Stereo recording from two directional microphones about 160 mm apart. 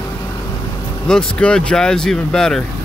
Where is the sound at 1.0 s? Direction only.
5° left (ahead or behind).